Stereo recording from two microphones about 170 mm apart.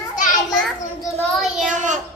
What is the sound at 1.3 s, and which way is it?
Speech, centre (ahead or behind).